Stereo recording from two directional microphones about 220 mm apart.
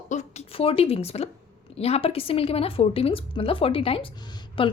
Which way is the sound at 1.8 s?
25° left (ahead or behind).